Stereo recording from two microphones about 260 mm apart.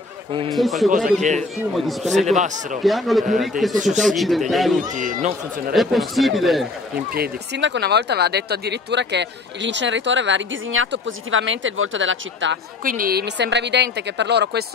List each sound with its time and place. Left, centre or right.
0.5 s speech: centre
0.8 s a woman's voice: right
1.7 s speech: centre
2.2 s speech: right
2.8 s speech: centre
3.7 s speech: right
4.0 s speech: centre
4.9 s a woman's voice: right
5.7 s speech: centre
7.1 s speech: right
12.8 s a woman's voice: right